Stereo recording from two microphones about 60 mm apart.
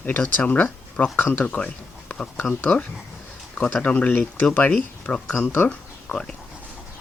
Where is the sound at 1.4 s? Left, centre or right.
Centre.